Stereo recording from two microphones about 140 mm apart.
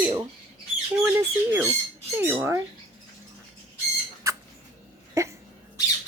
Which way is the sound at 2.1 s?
15° right (ahead or behind).